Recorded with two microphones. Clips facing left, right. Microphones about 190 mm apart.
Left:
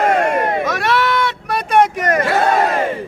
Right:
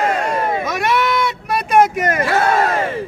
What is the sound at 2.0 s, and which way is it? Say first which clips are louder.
Speech: left 1 dB; 5° right (ahead or behind).